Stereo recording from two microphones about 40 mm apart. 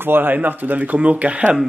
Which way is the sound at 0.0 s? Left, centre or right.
Right.